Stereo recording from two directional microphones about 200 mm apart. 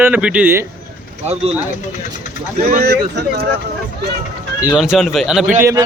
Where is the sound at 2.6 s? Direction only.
50° right (ahead or behind).